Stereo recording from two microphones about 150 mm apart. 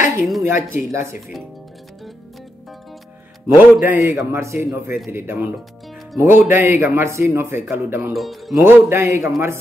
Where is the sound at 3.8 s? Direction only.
15° right (ahead or behind).